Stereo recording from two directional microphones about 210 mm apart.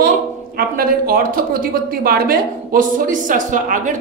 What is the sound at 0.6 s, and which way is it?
A woman's voice, 45° right (ahead or behind).